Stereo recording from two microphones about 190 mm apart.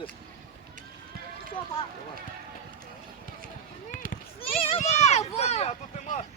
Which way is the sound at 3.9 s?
45° left (ahead or behind).